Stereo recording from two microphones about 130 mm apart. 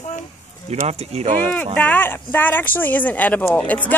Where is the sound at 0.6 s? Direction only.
55° right (ahead or behind).